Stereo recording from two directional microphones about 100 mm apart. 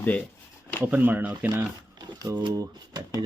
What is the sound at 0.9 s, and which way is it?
Speech, 15° right (ahead or behind).